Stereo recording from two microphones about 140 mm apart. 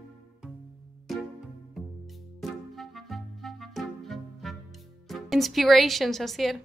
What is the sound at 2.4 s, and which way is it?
Music, centre (ahead or behind).